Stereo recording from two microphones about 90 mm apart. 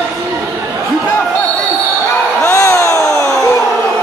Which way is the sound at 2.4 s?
30° left (ahead or behind).